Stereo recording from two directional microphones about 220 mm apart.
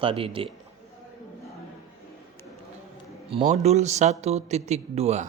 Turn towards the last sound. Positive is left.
turn(degrees=-30)  # may be behind; listen again after turning